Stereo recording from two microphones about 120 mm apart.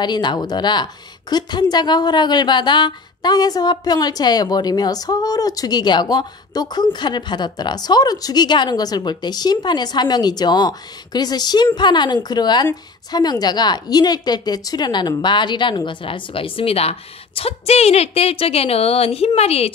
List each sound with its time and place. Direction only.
0.0 s a woman's voice: 35° left (ahead or behind); by 19.7 s 60° left (ahead or behind)